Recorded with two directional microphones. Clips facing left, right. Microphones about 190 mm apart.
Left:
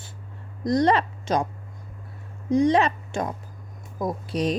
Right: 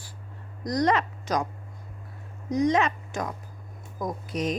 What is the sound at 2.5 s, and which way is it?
A woman's voice, 30° left (ahead or behind).